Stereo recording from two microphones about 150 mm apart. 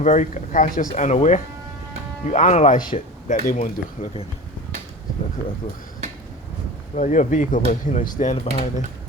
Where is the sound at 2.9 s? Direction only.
45° left (ahead or behind).